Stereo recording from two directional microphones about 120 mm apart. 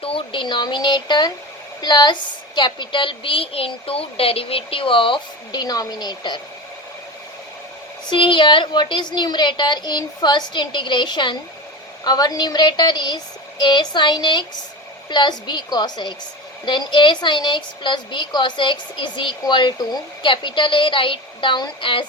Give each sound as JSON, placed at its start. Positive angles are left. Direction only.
{"t": 0.0, "sound": "a woman's voice", "side_deg": 50}
{"t": 8.1, "sound": "a woman's voice", "side_deg": 45}